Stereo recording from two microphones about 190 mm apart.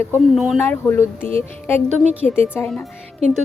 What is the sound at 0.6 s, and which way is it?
Speech, 10° left (ahead or behind).